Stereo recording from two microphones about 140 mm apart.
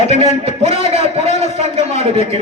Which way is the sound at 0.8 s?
45° right (ahead or behind).